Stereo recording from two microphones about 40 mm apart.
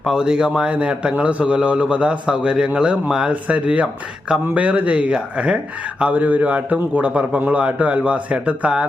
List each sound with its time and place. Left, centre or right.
0.2 s a man's voice: centre
3.2 s a man's voice: right
6.1 s a man's voice: right